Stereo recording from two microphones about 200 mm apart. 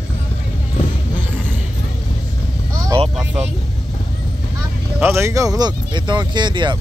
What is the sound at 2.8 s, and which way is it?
Vehicle, 25° right (ahead or behind).